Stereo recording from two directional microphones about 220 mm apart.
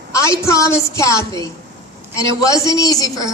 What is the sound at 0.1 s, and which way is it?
A woman's voice, 15° left (ahead or behind).